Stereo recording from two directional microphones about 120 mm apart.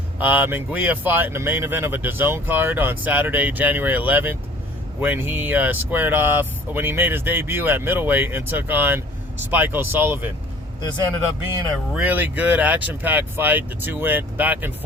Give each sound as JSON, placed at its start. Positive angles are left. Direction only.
{"t": 0.2, "sound": "speech", "side_deg": -15}
{"t": 11.9, "sound": "speech", "side_deg": -15}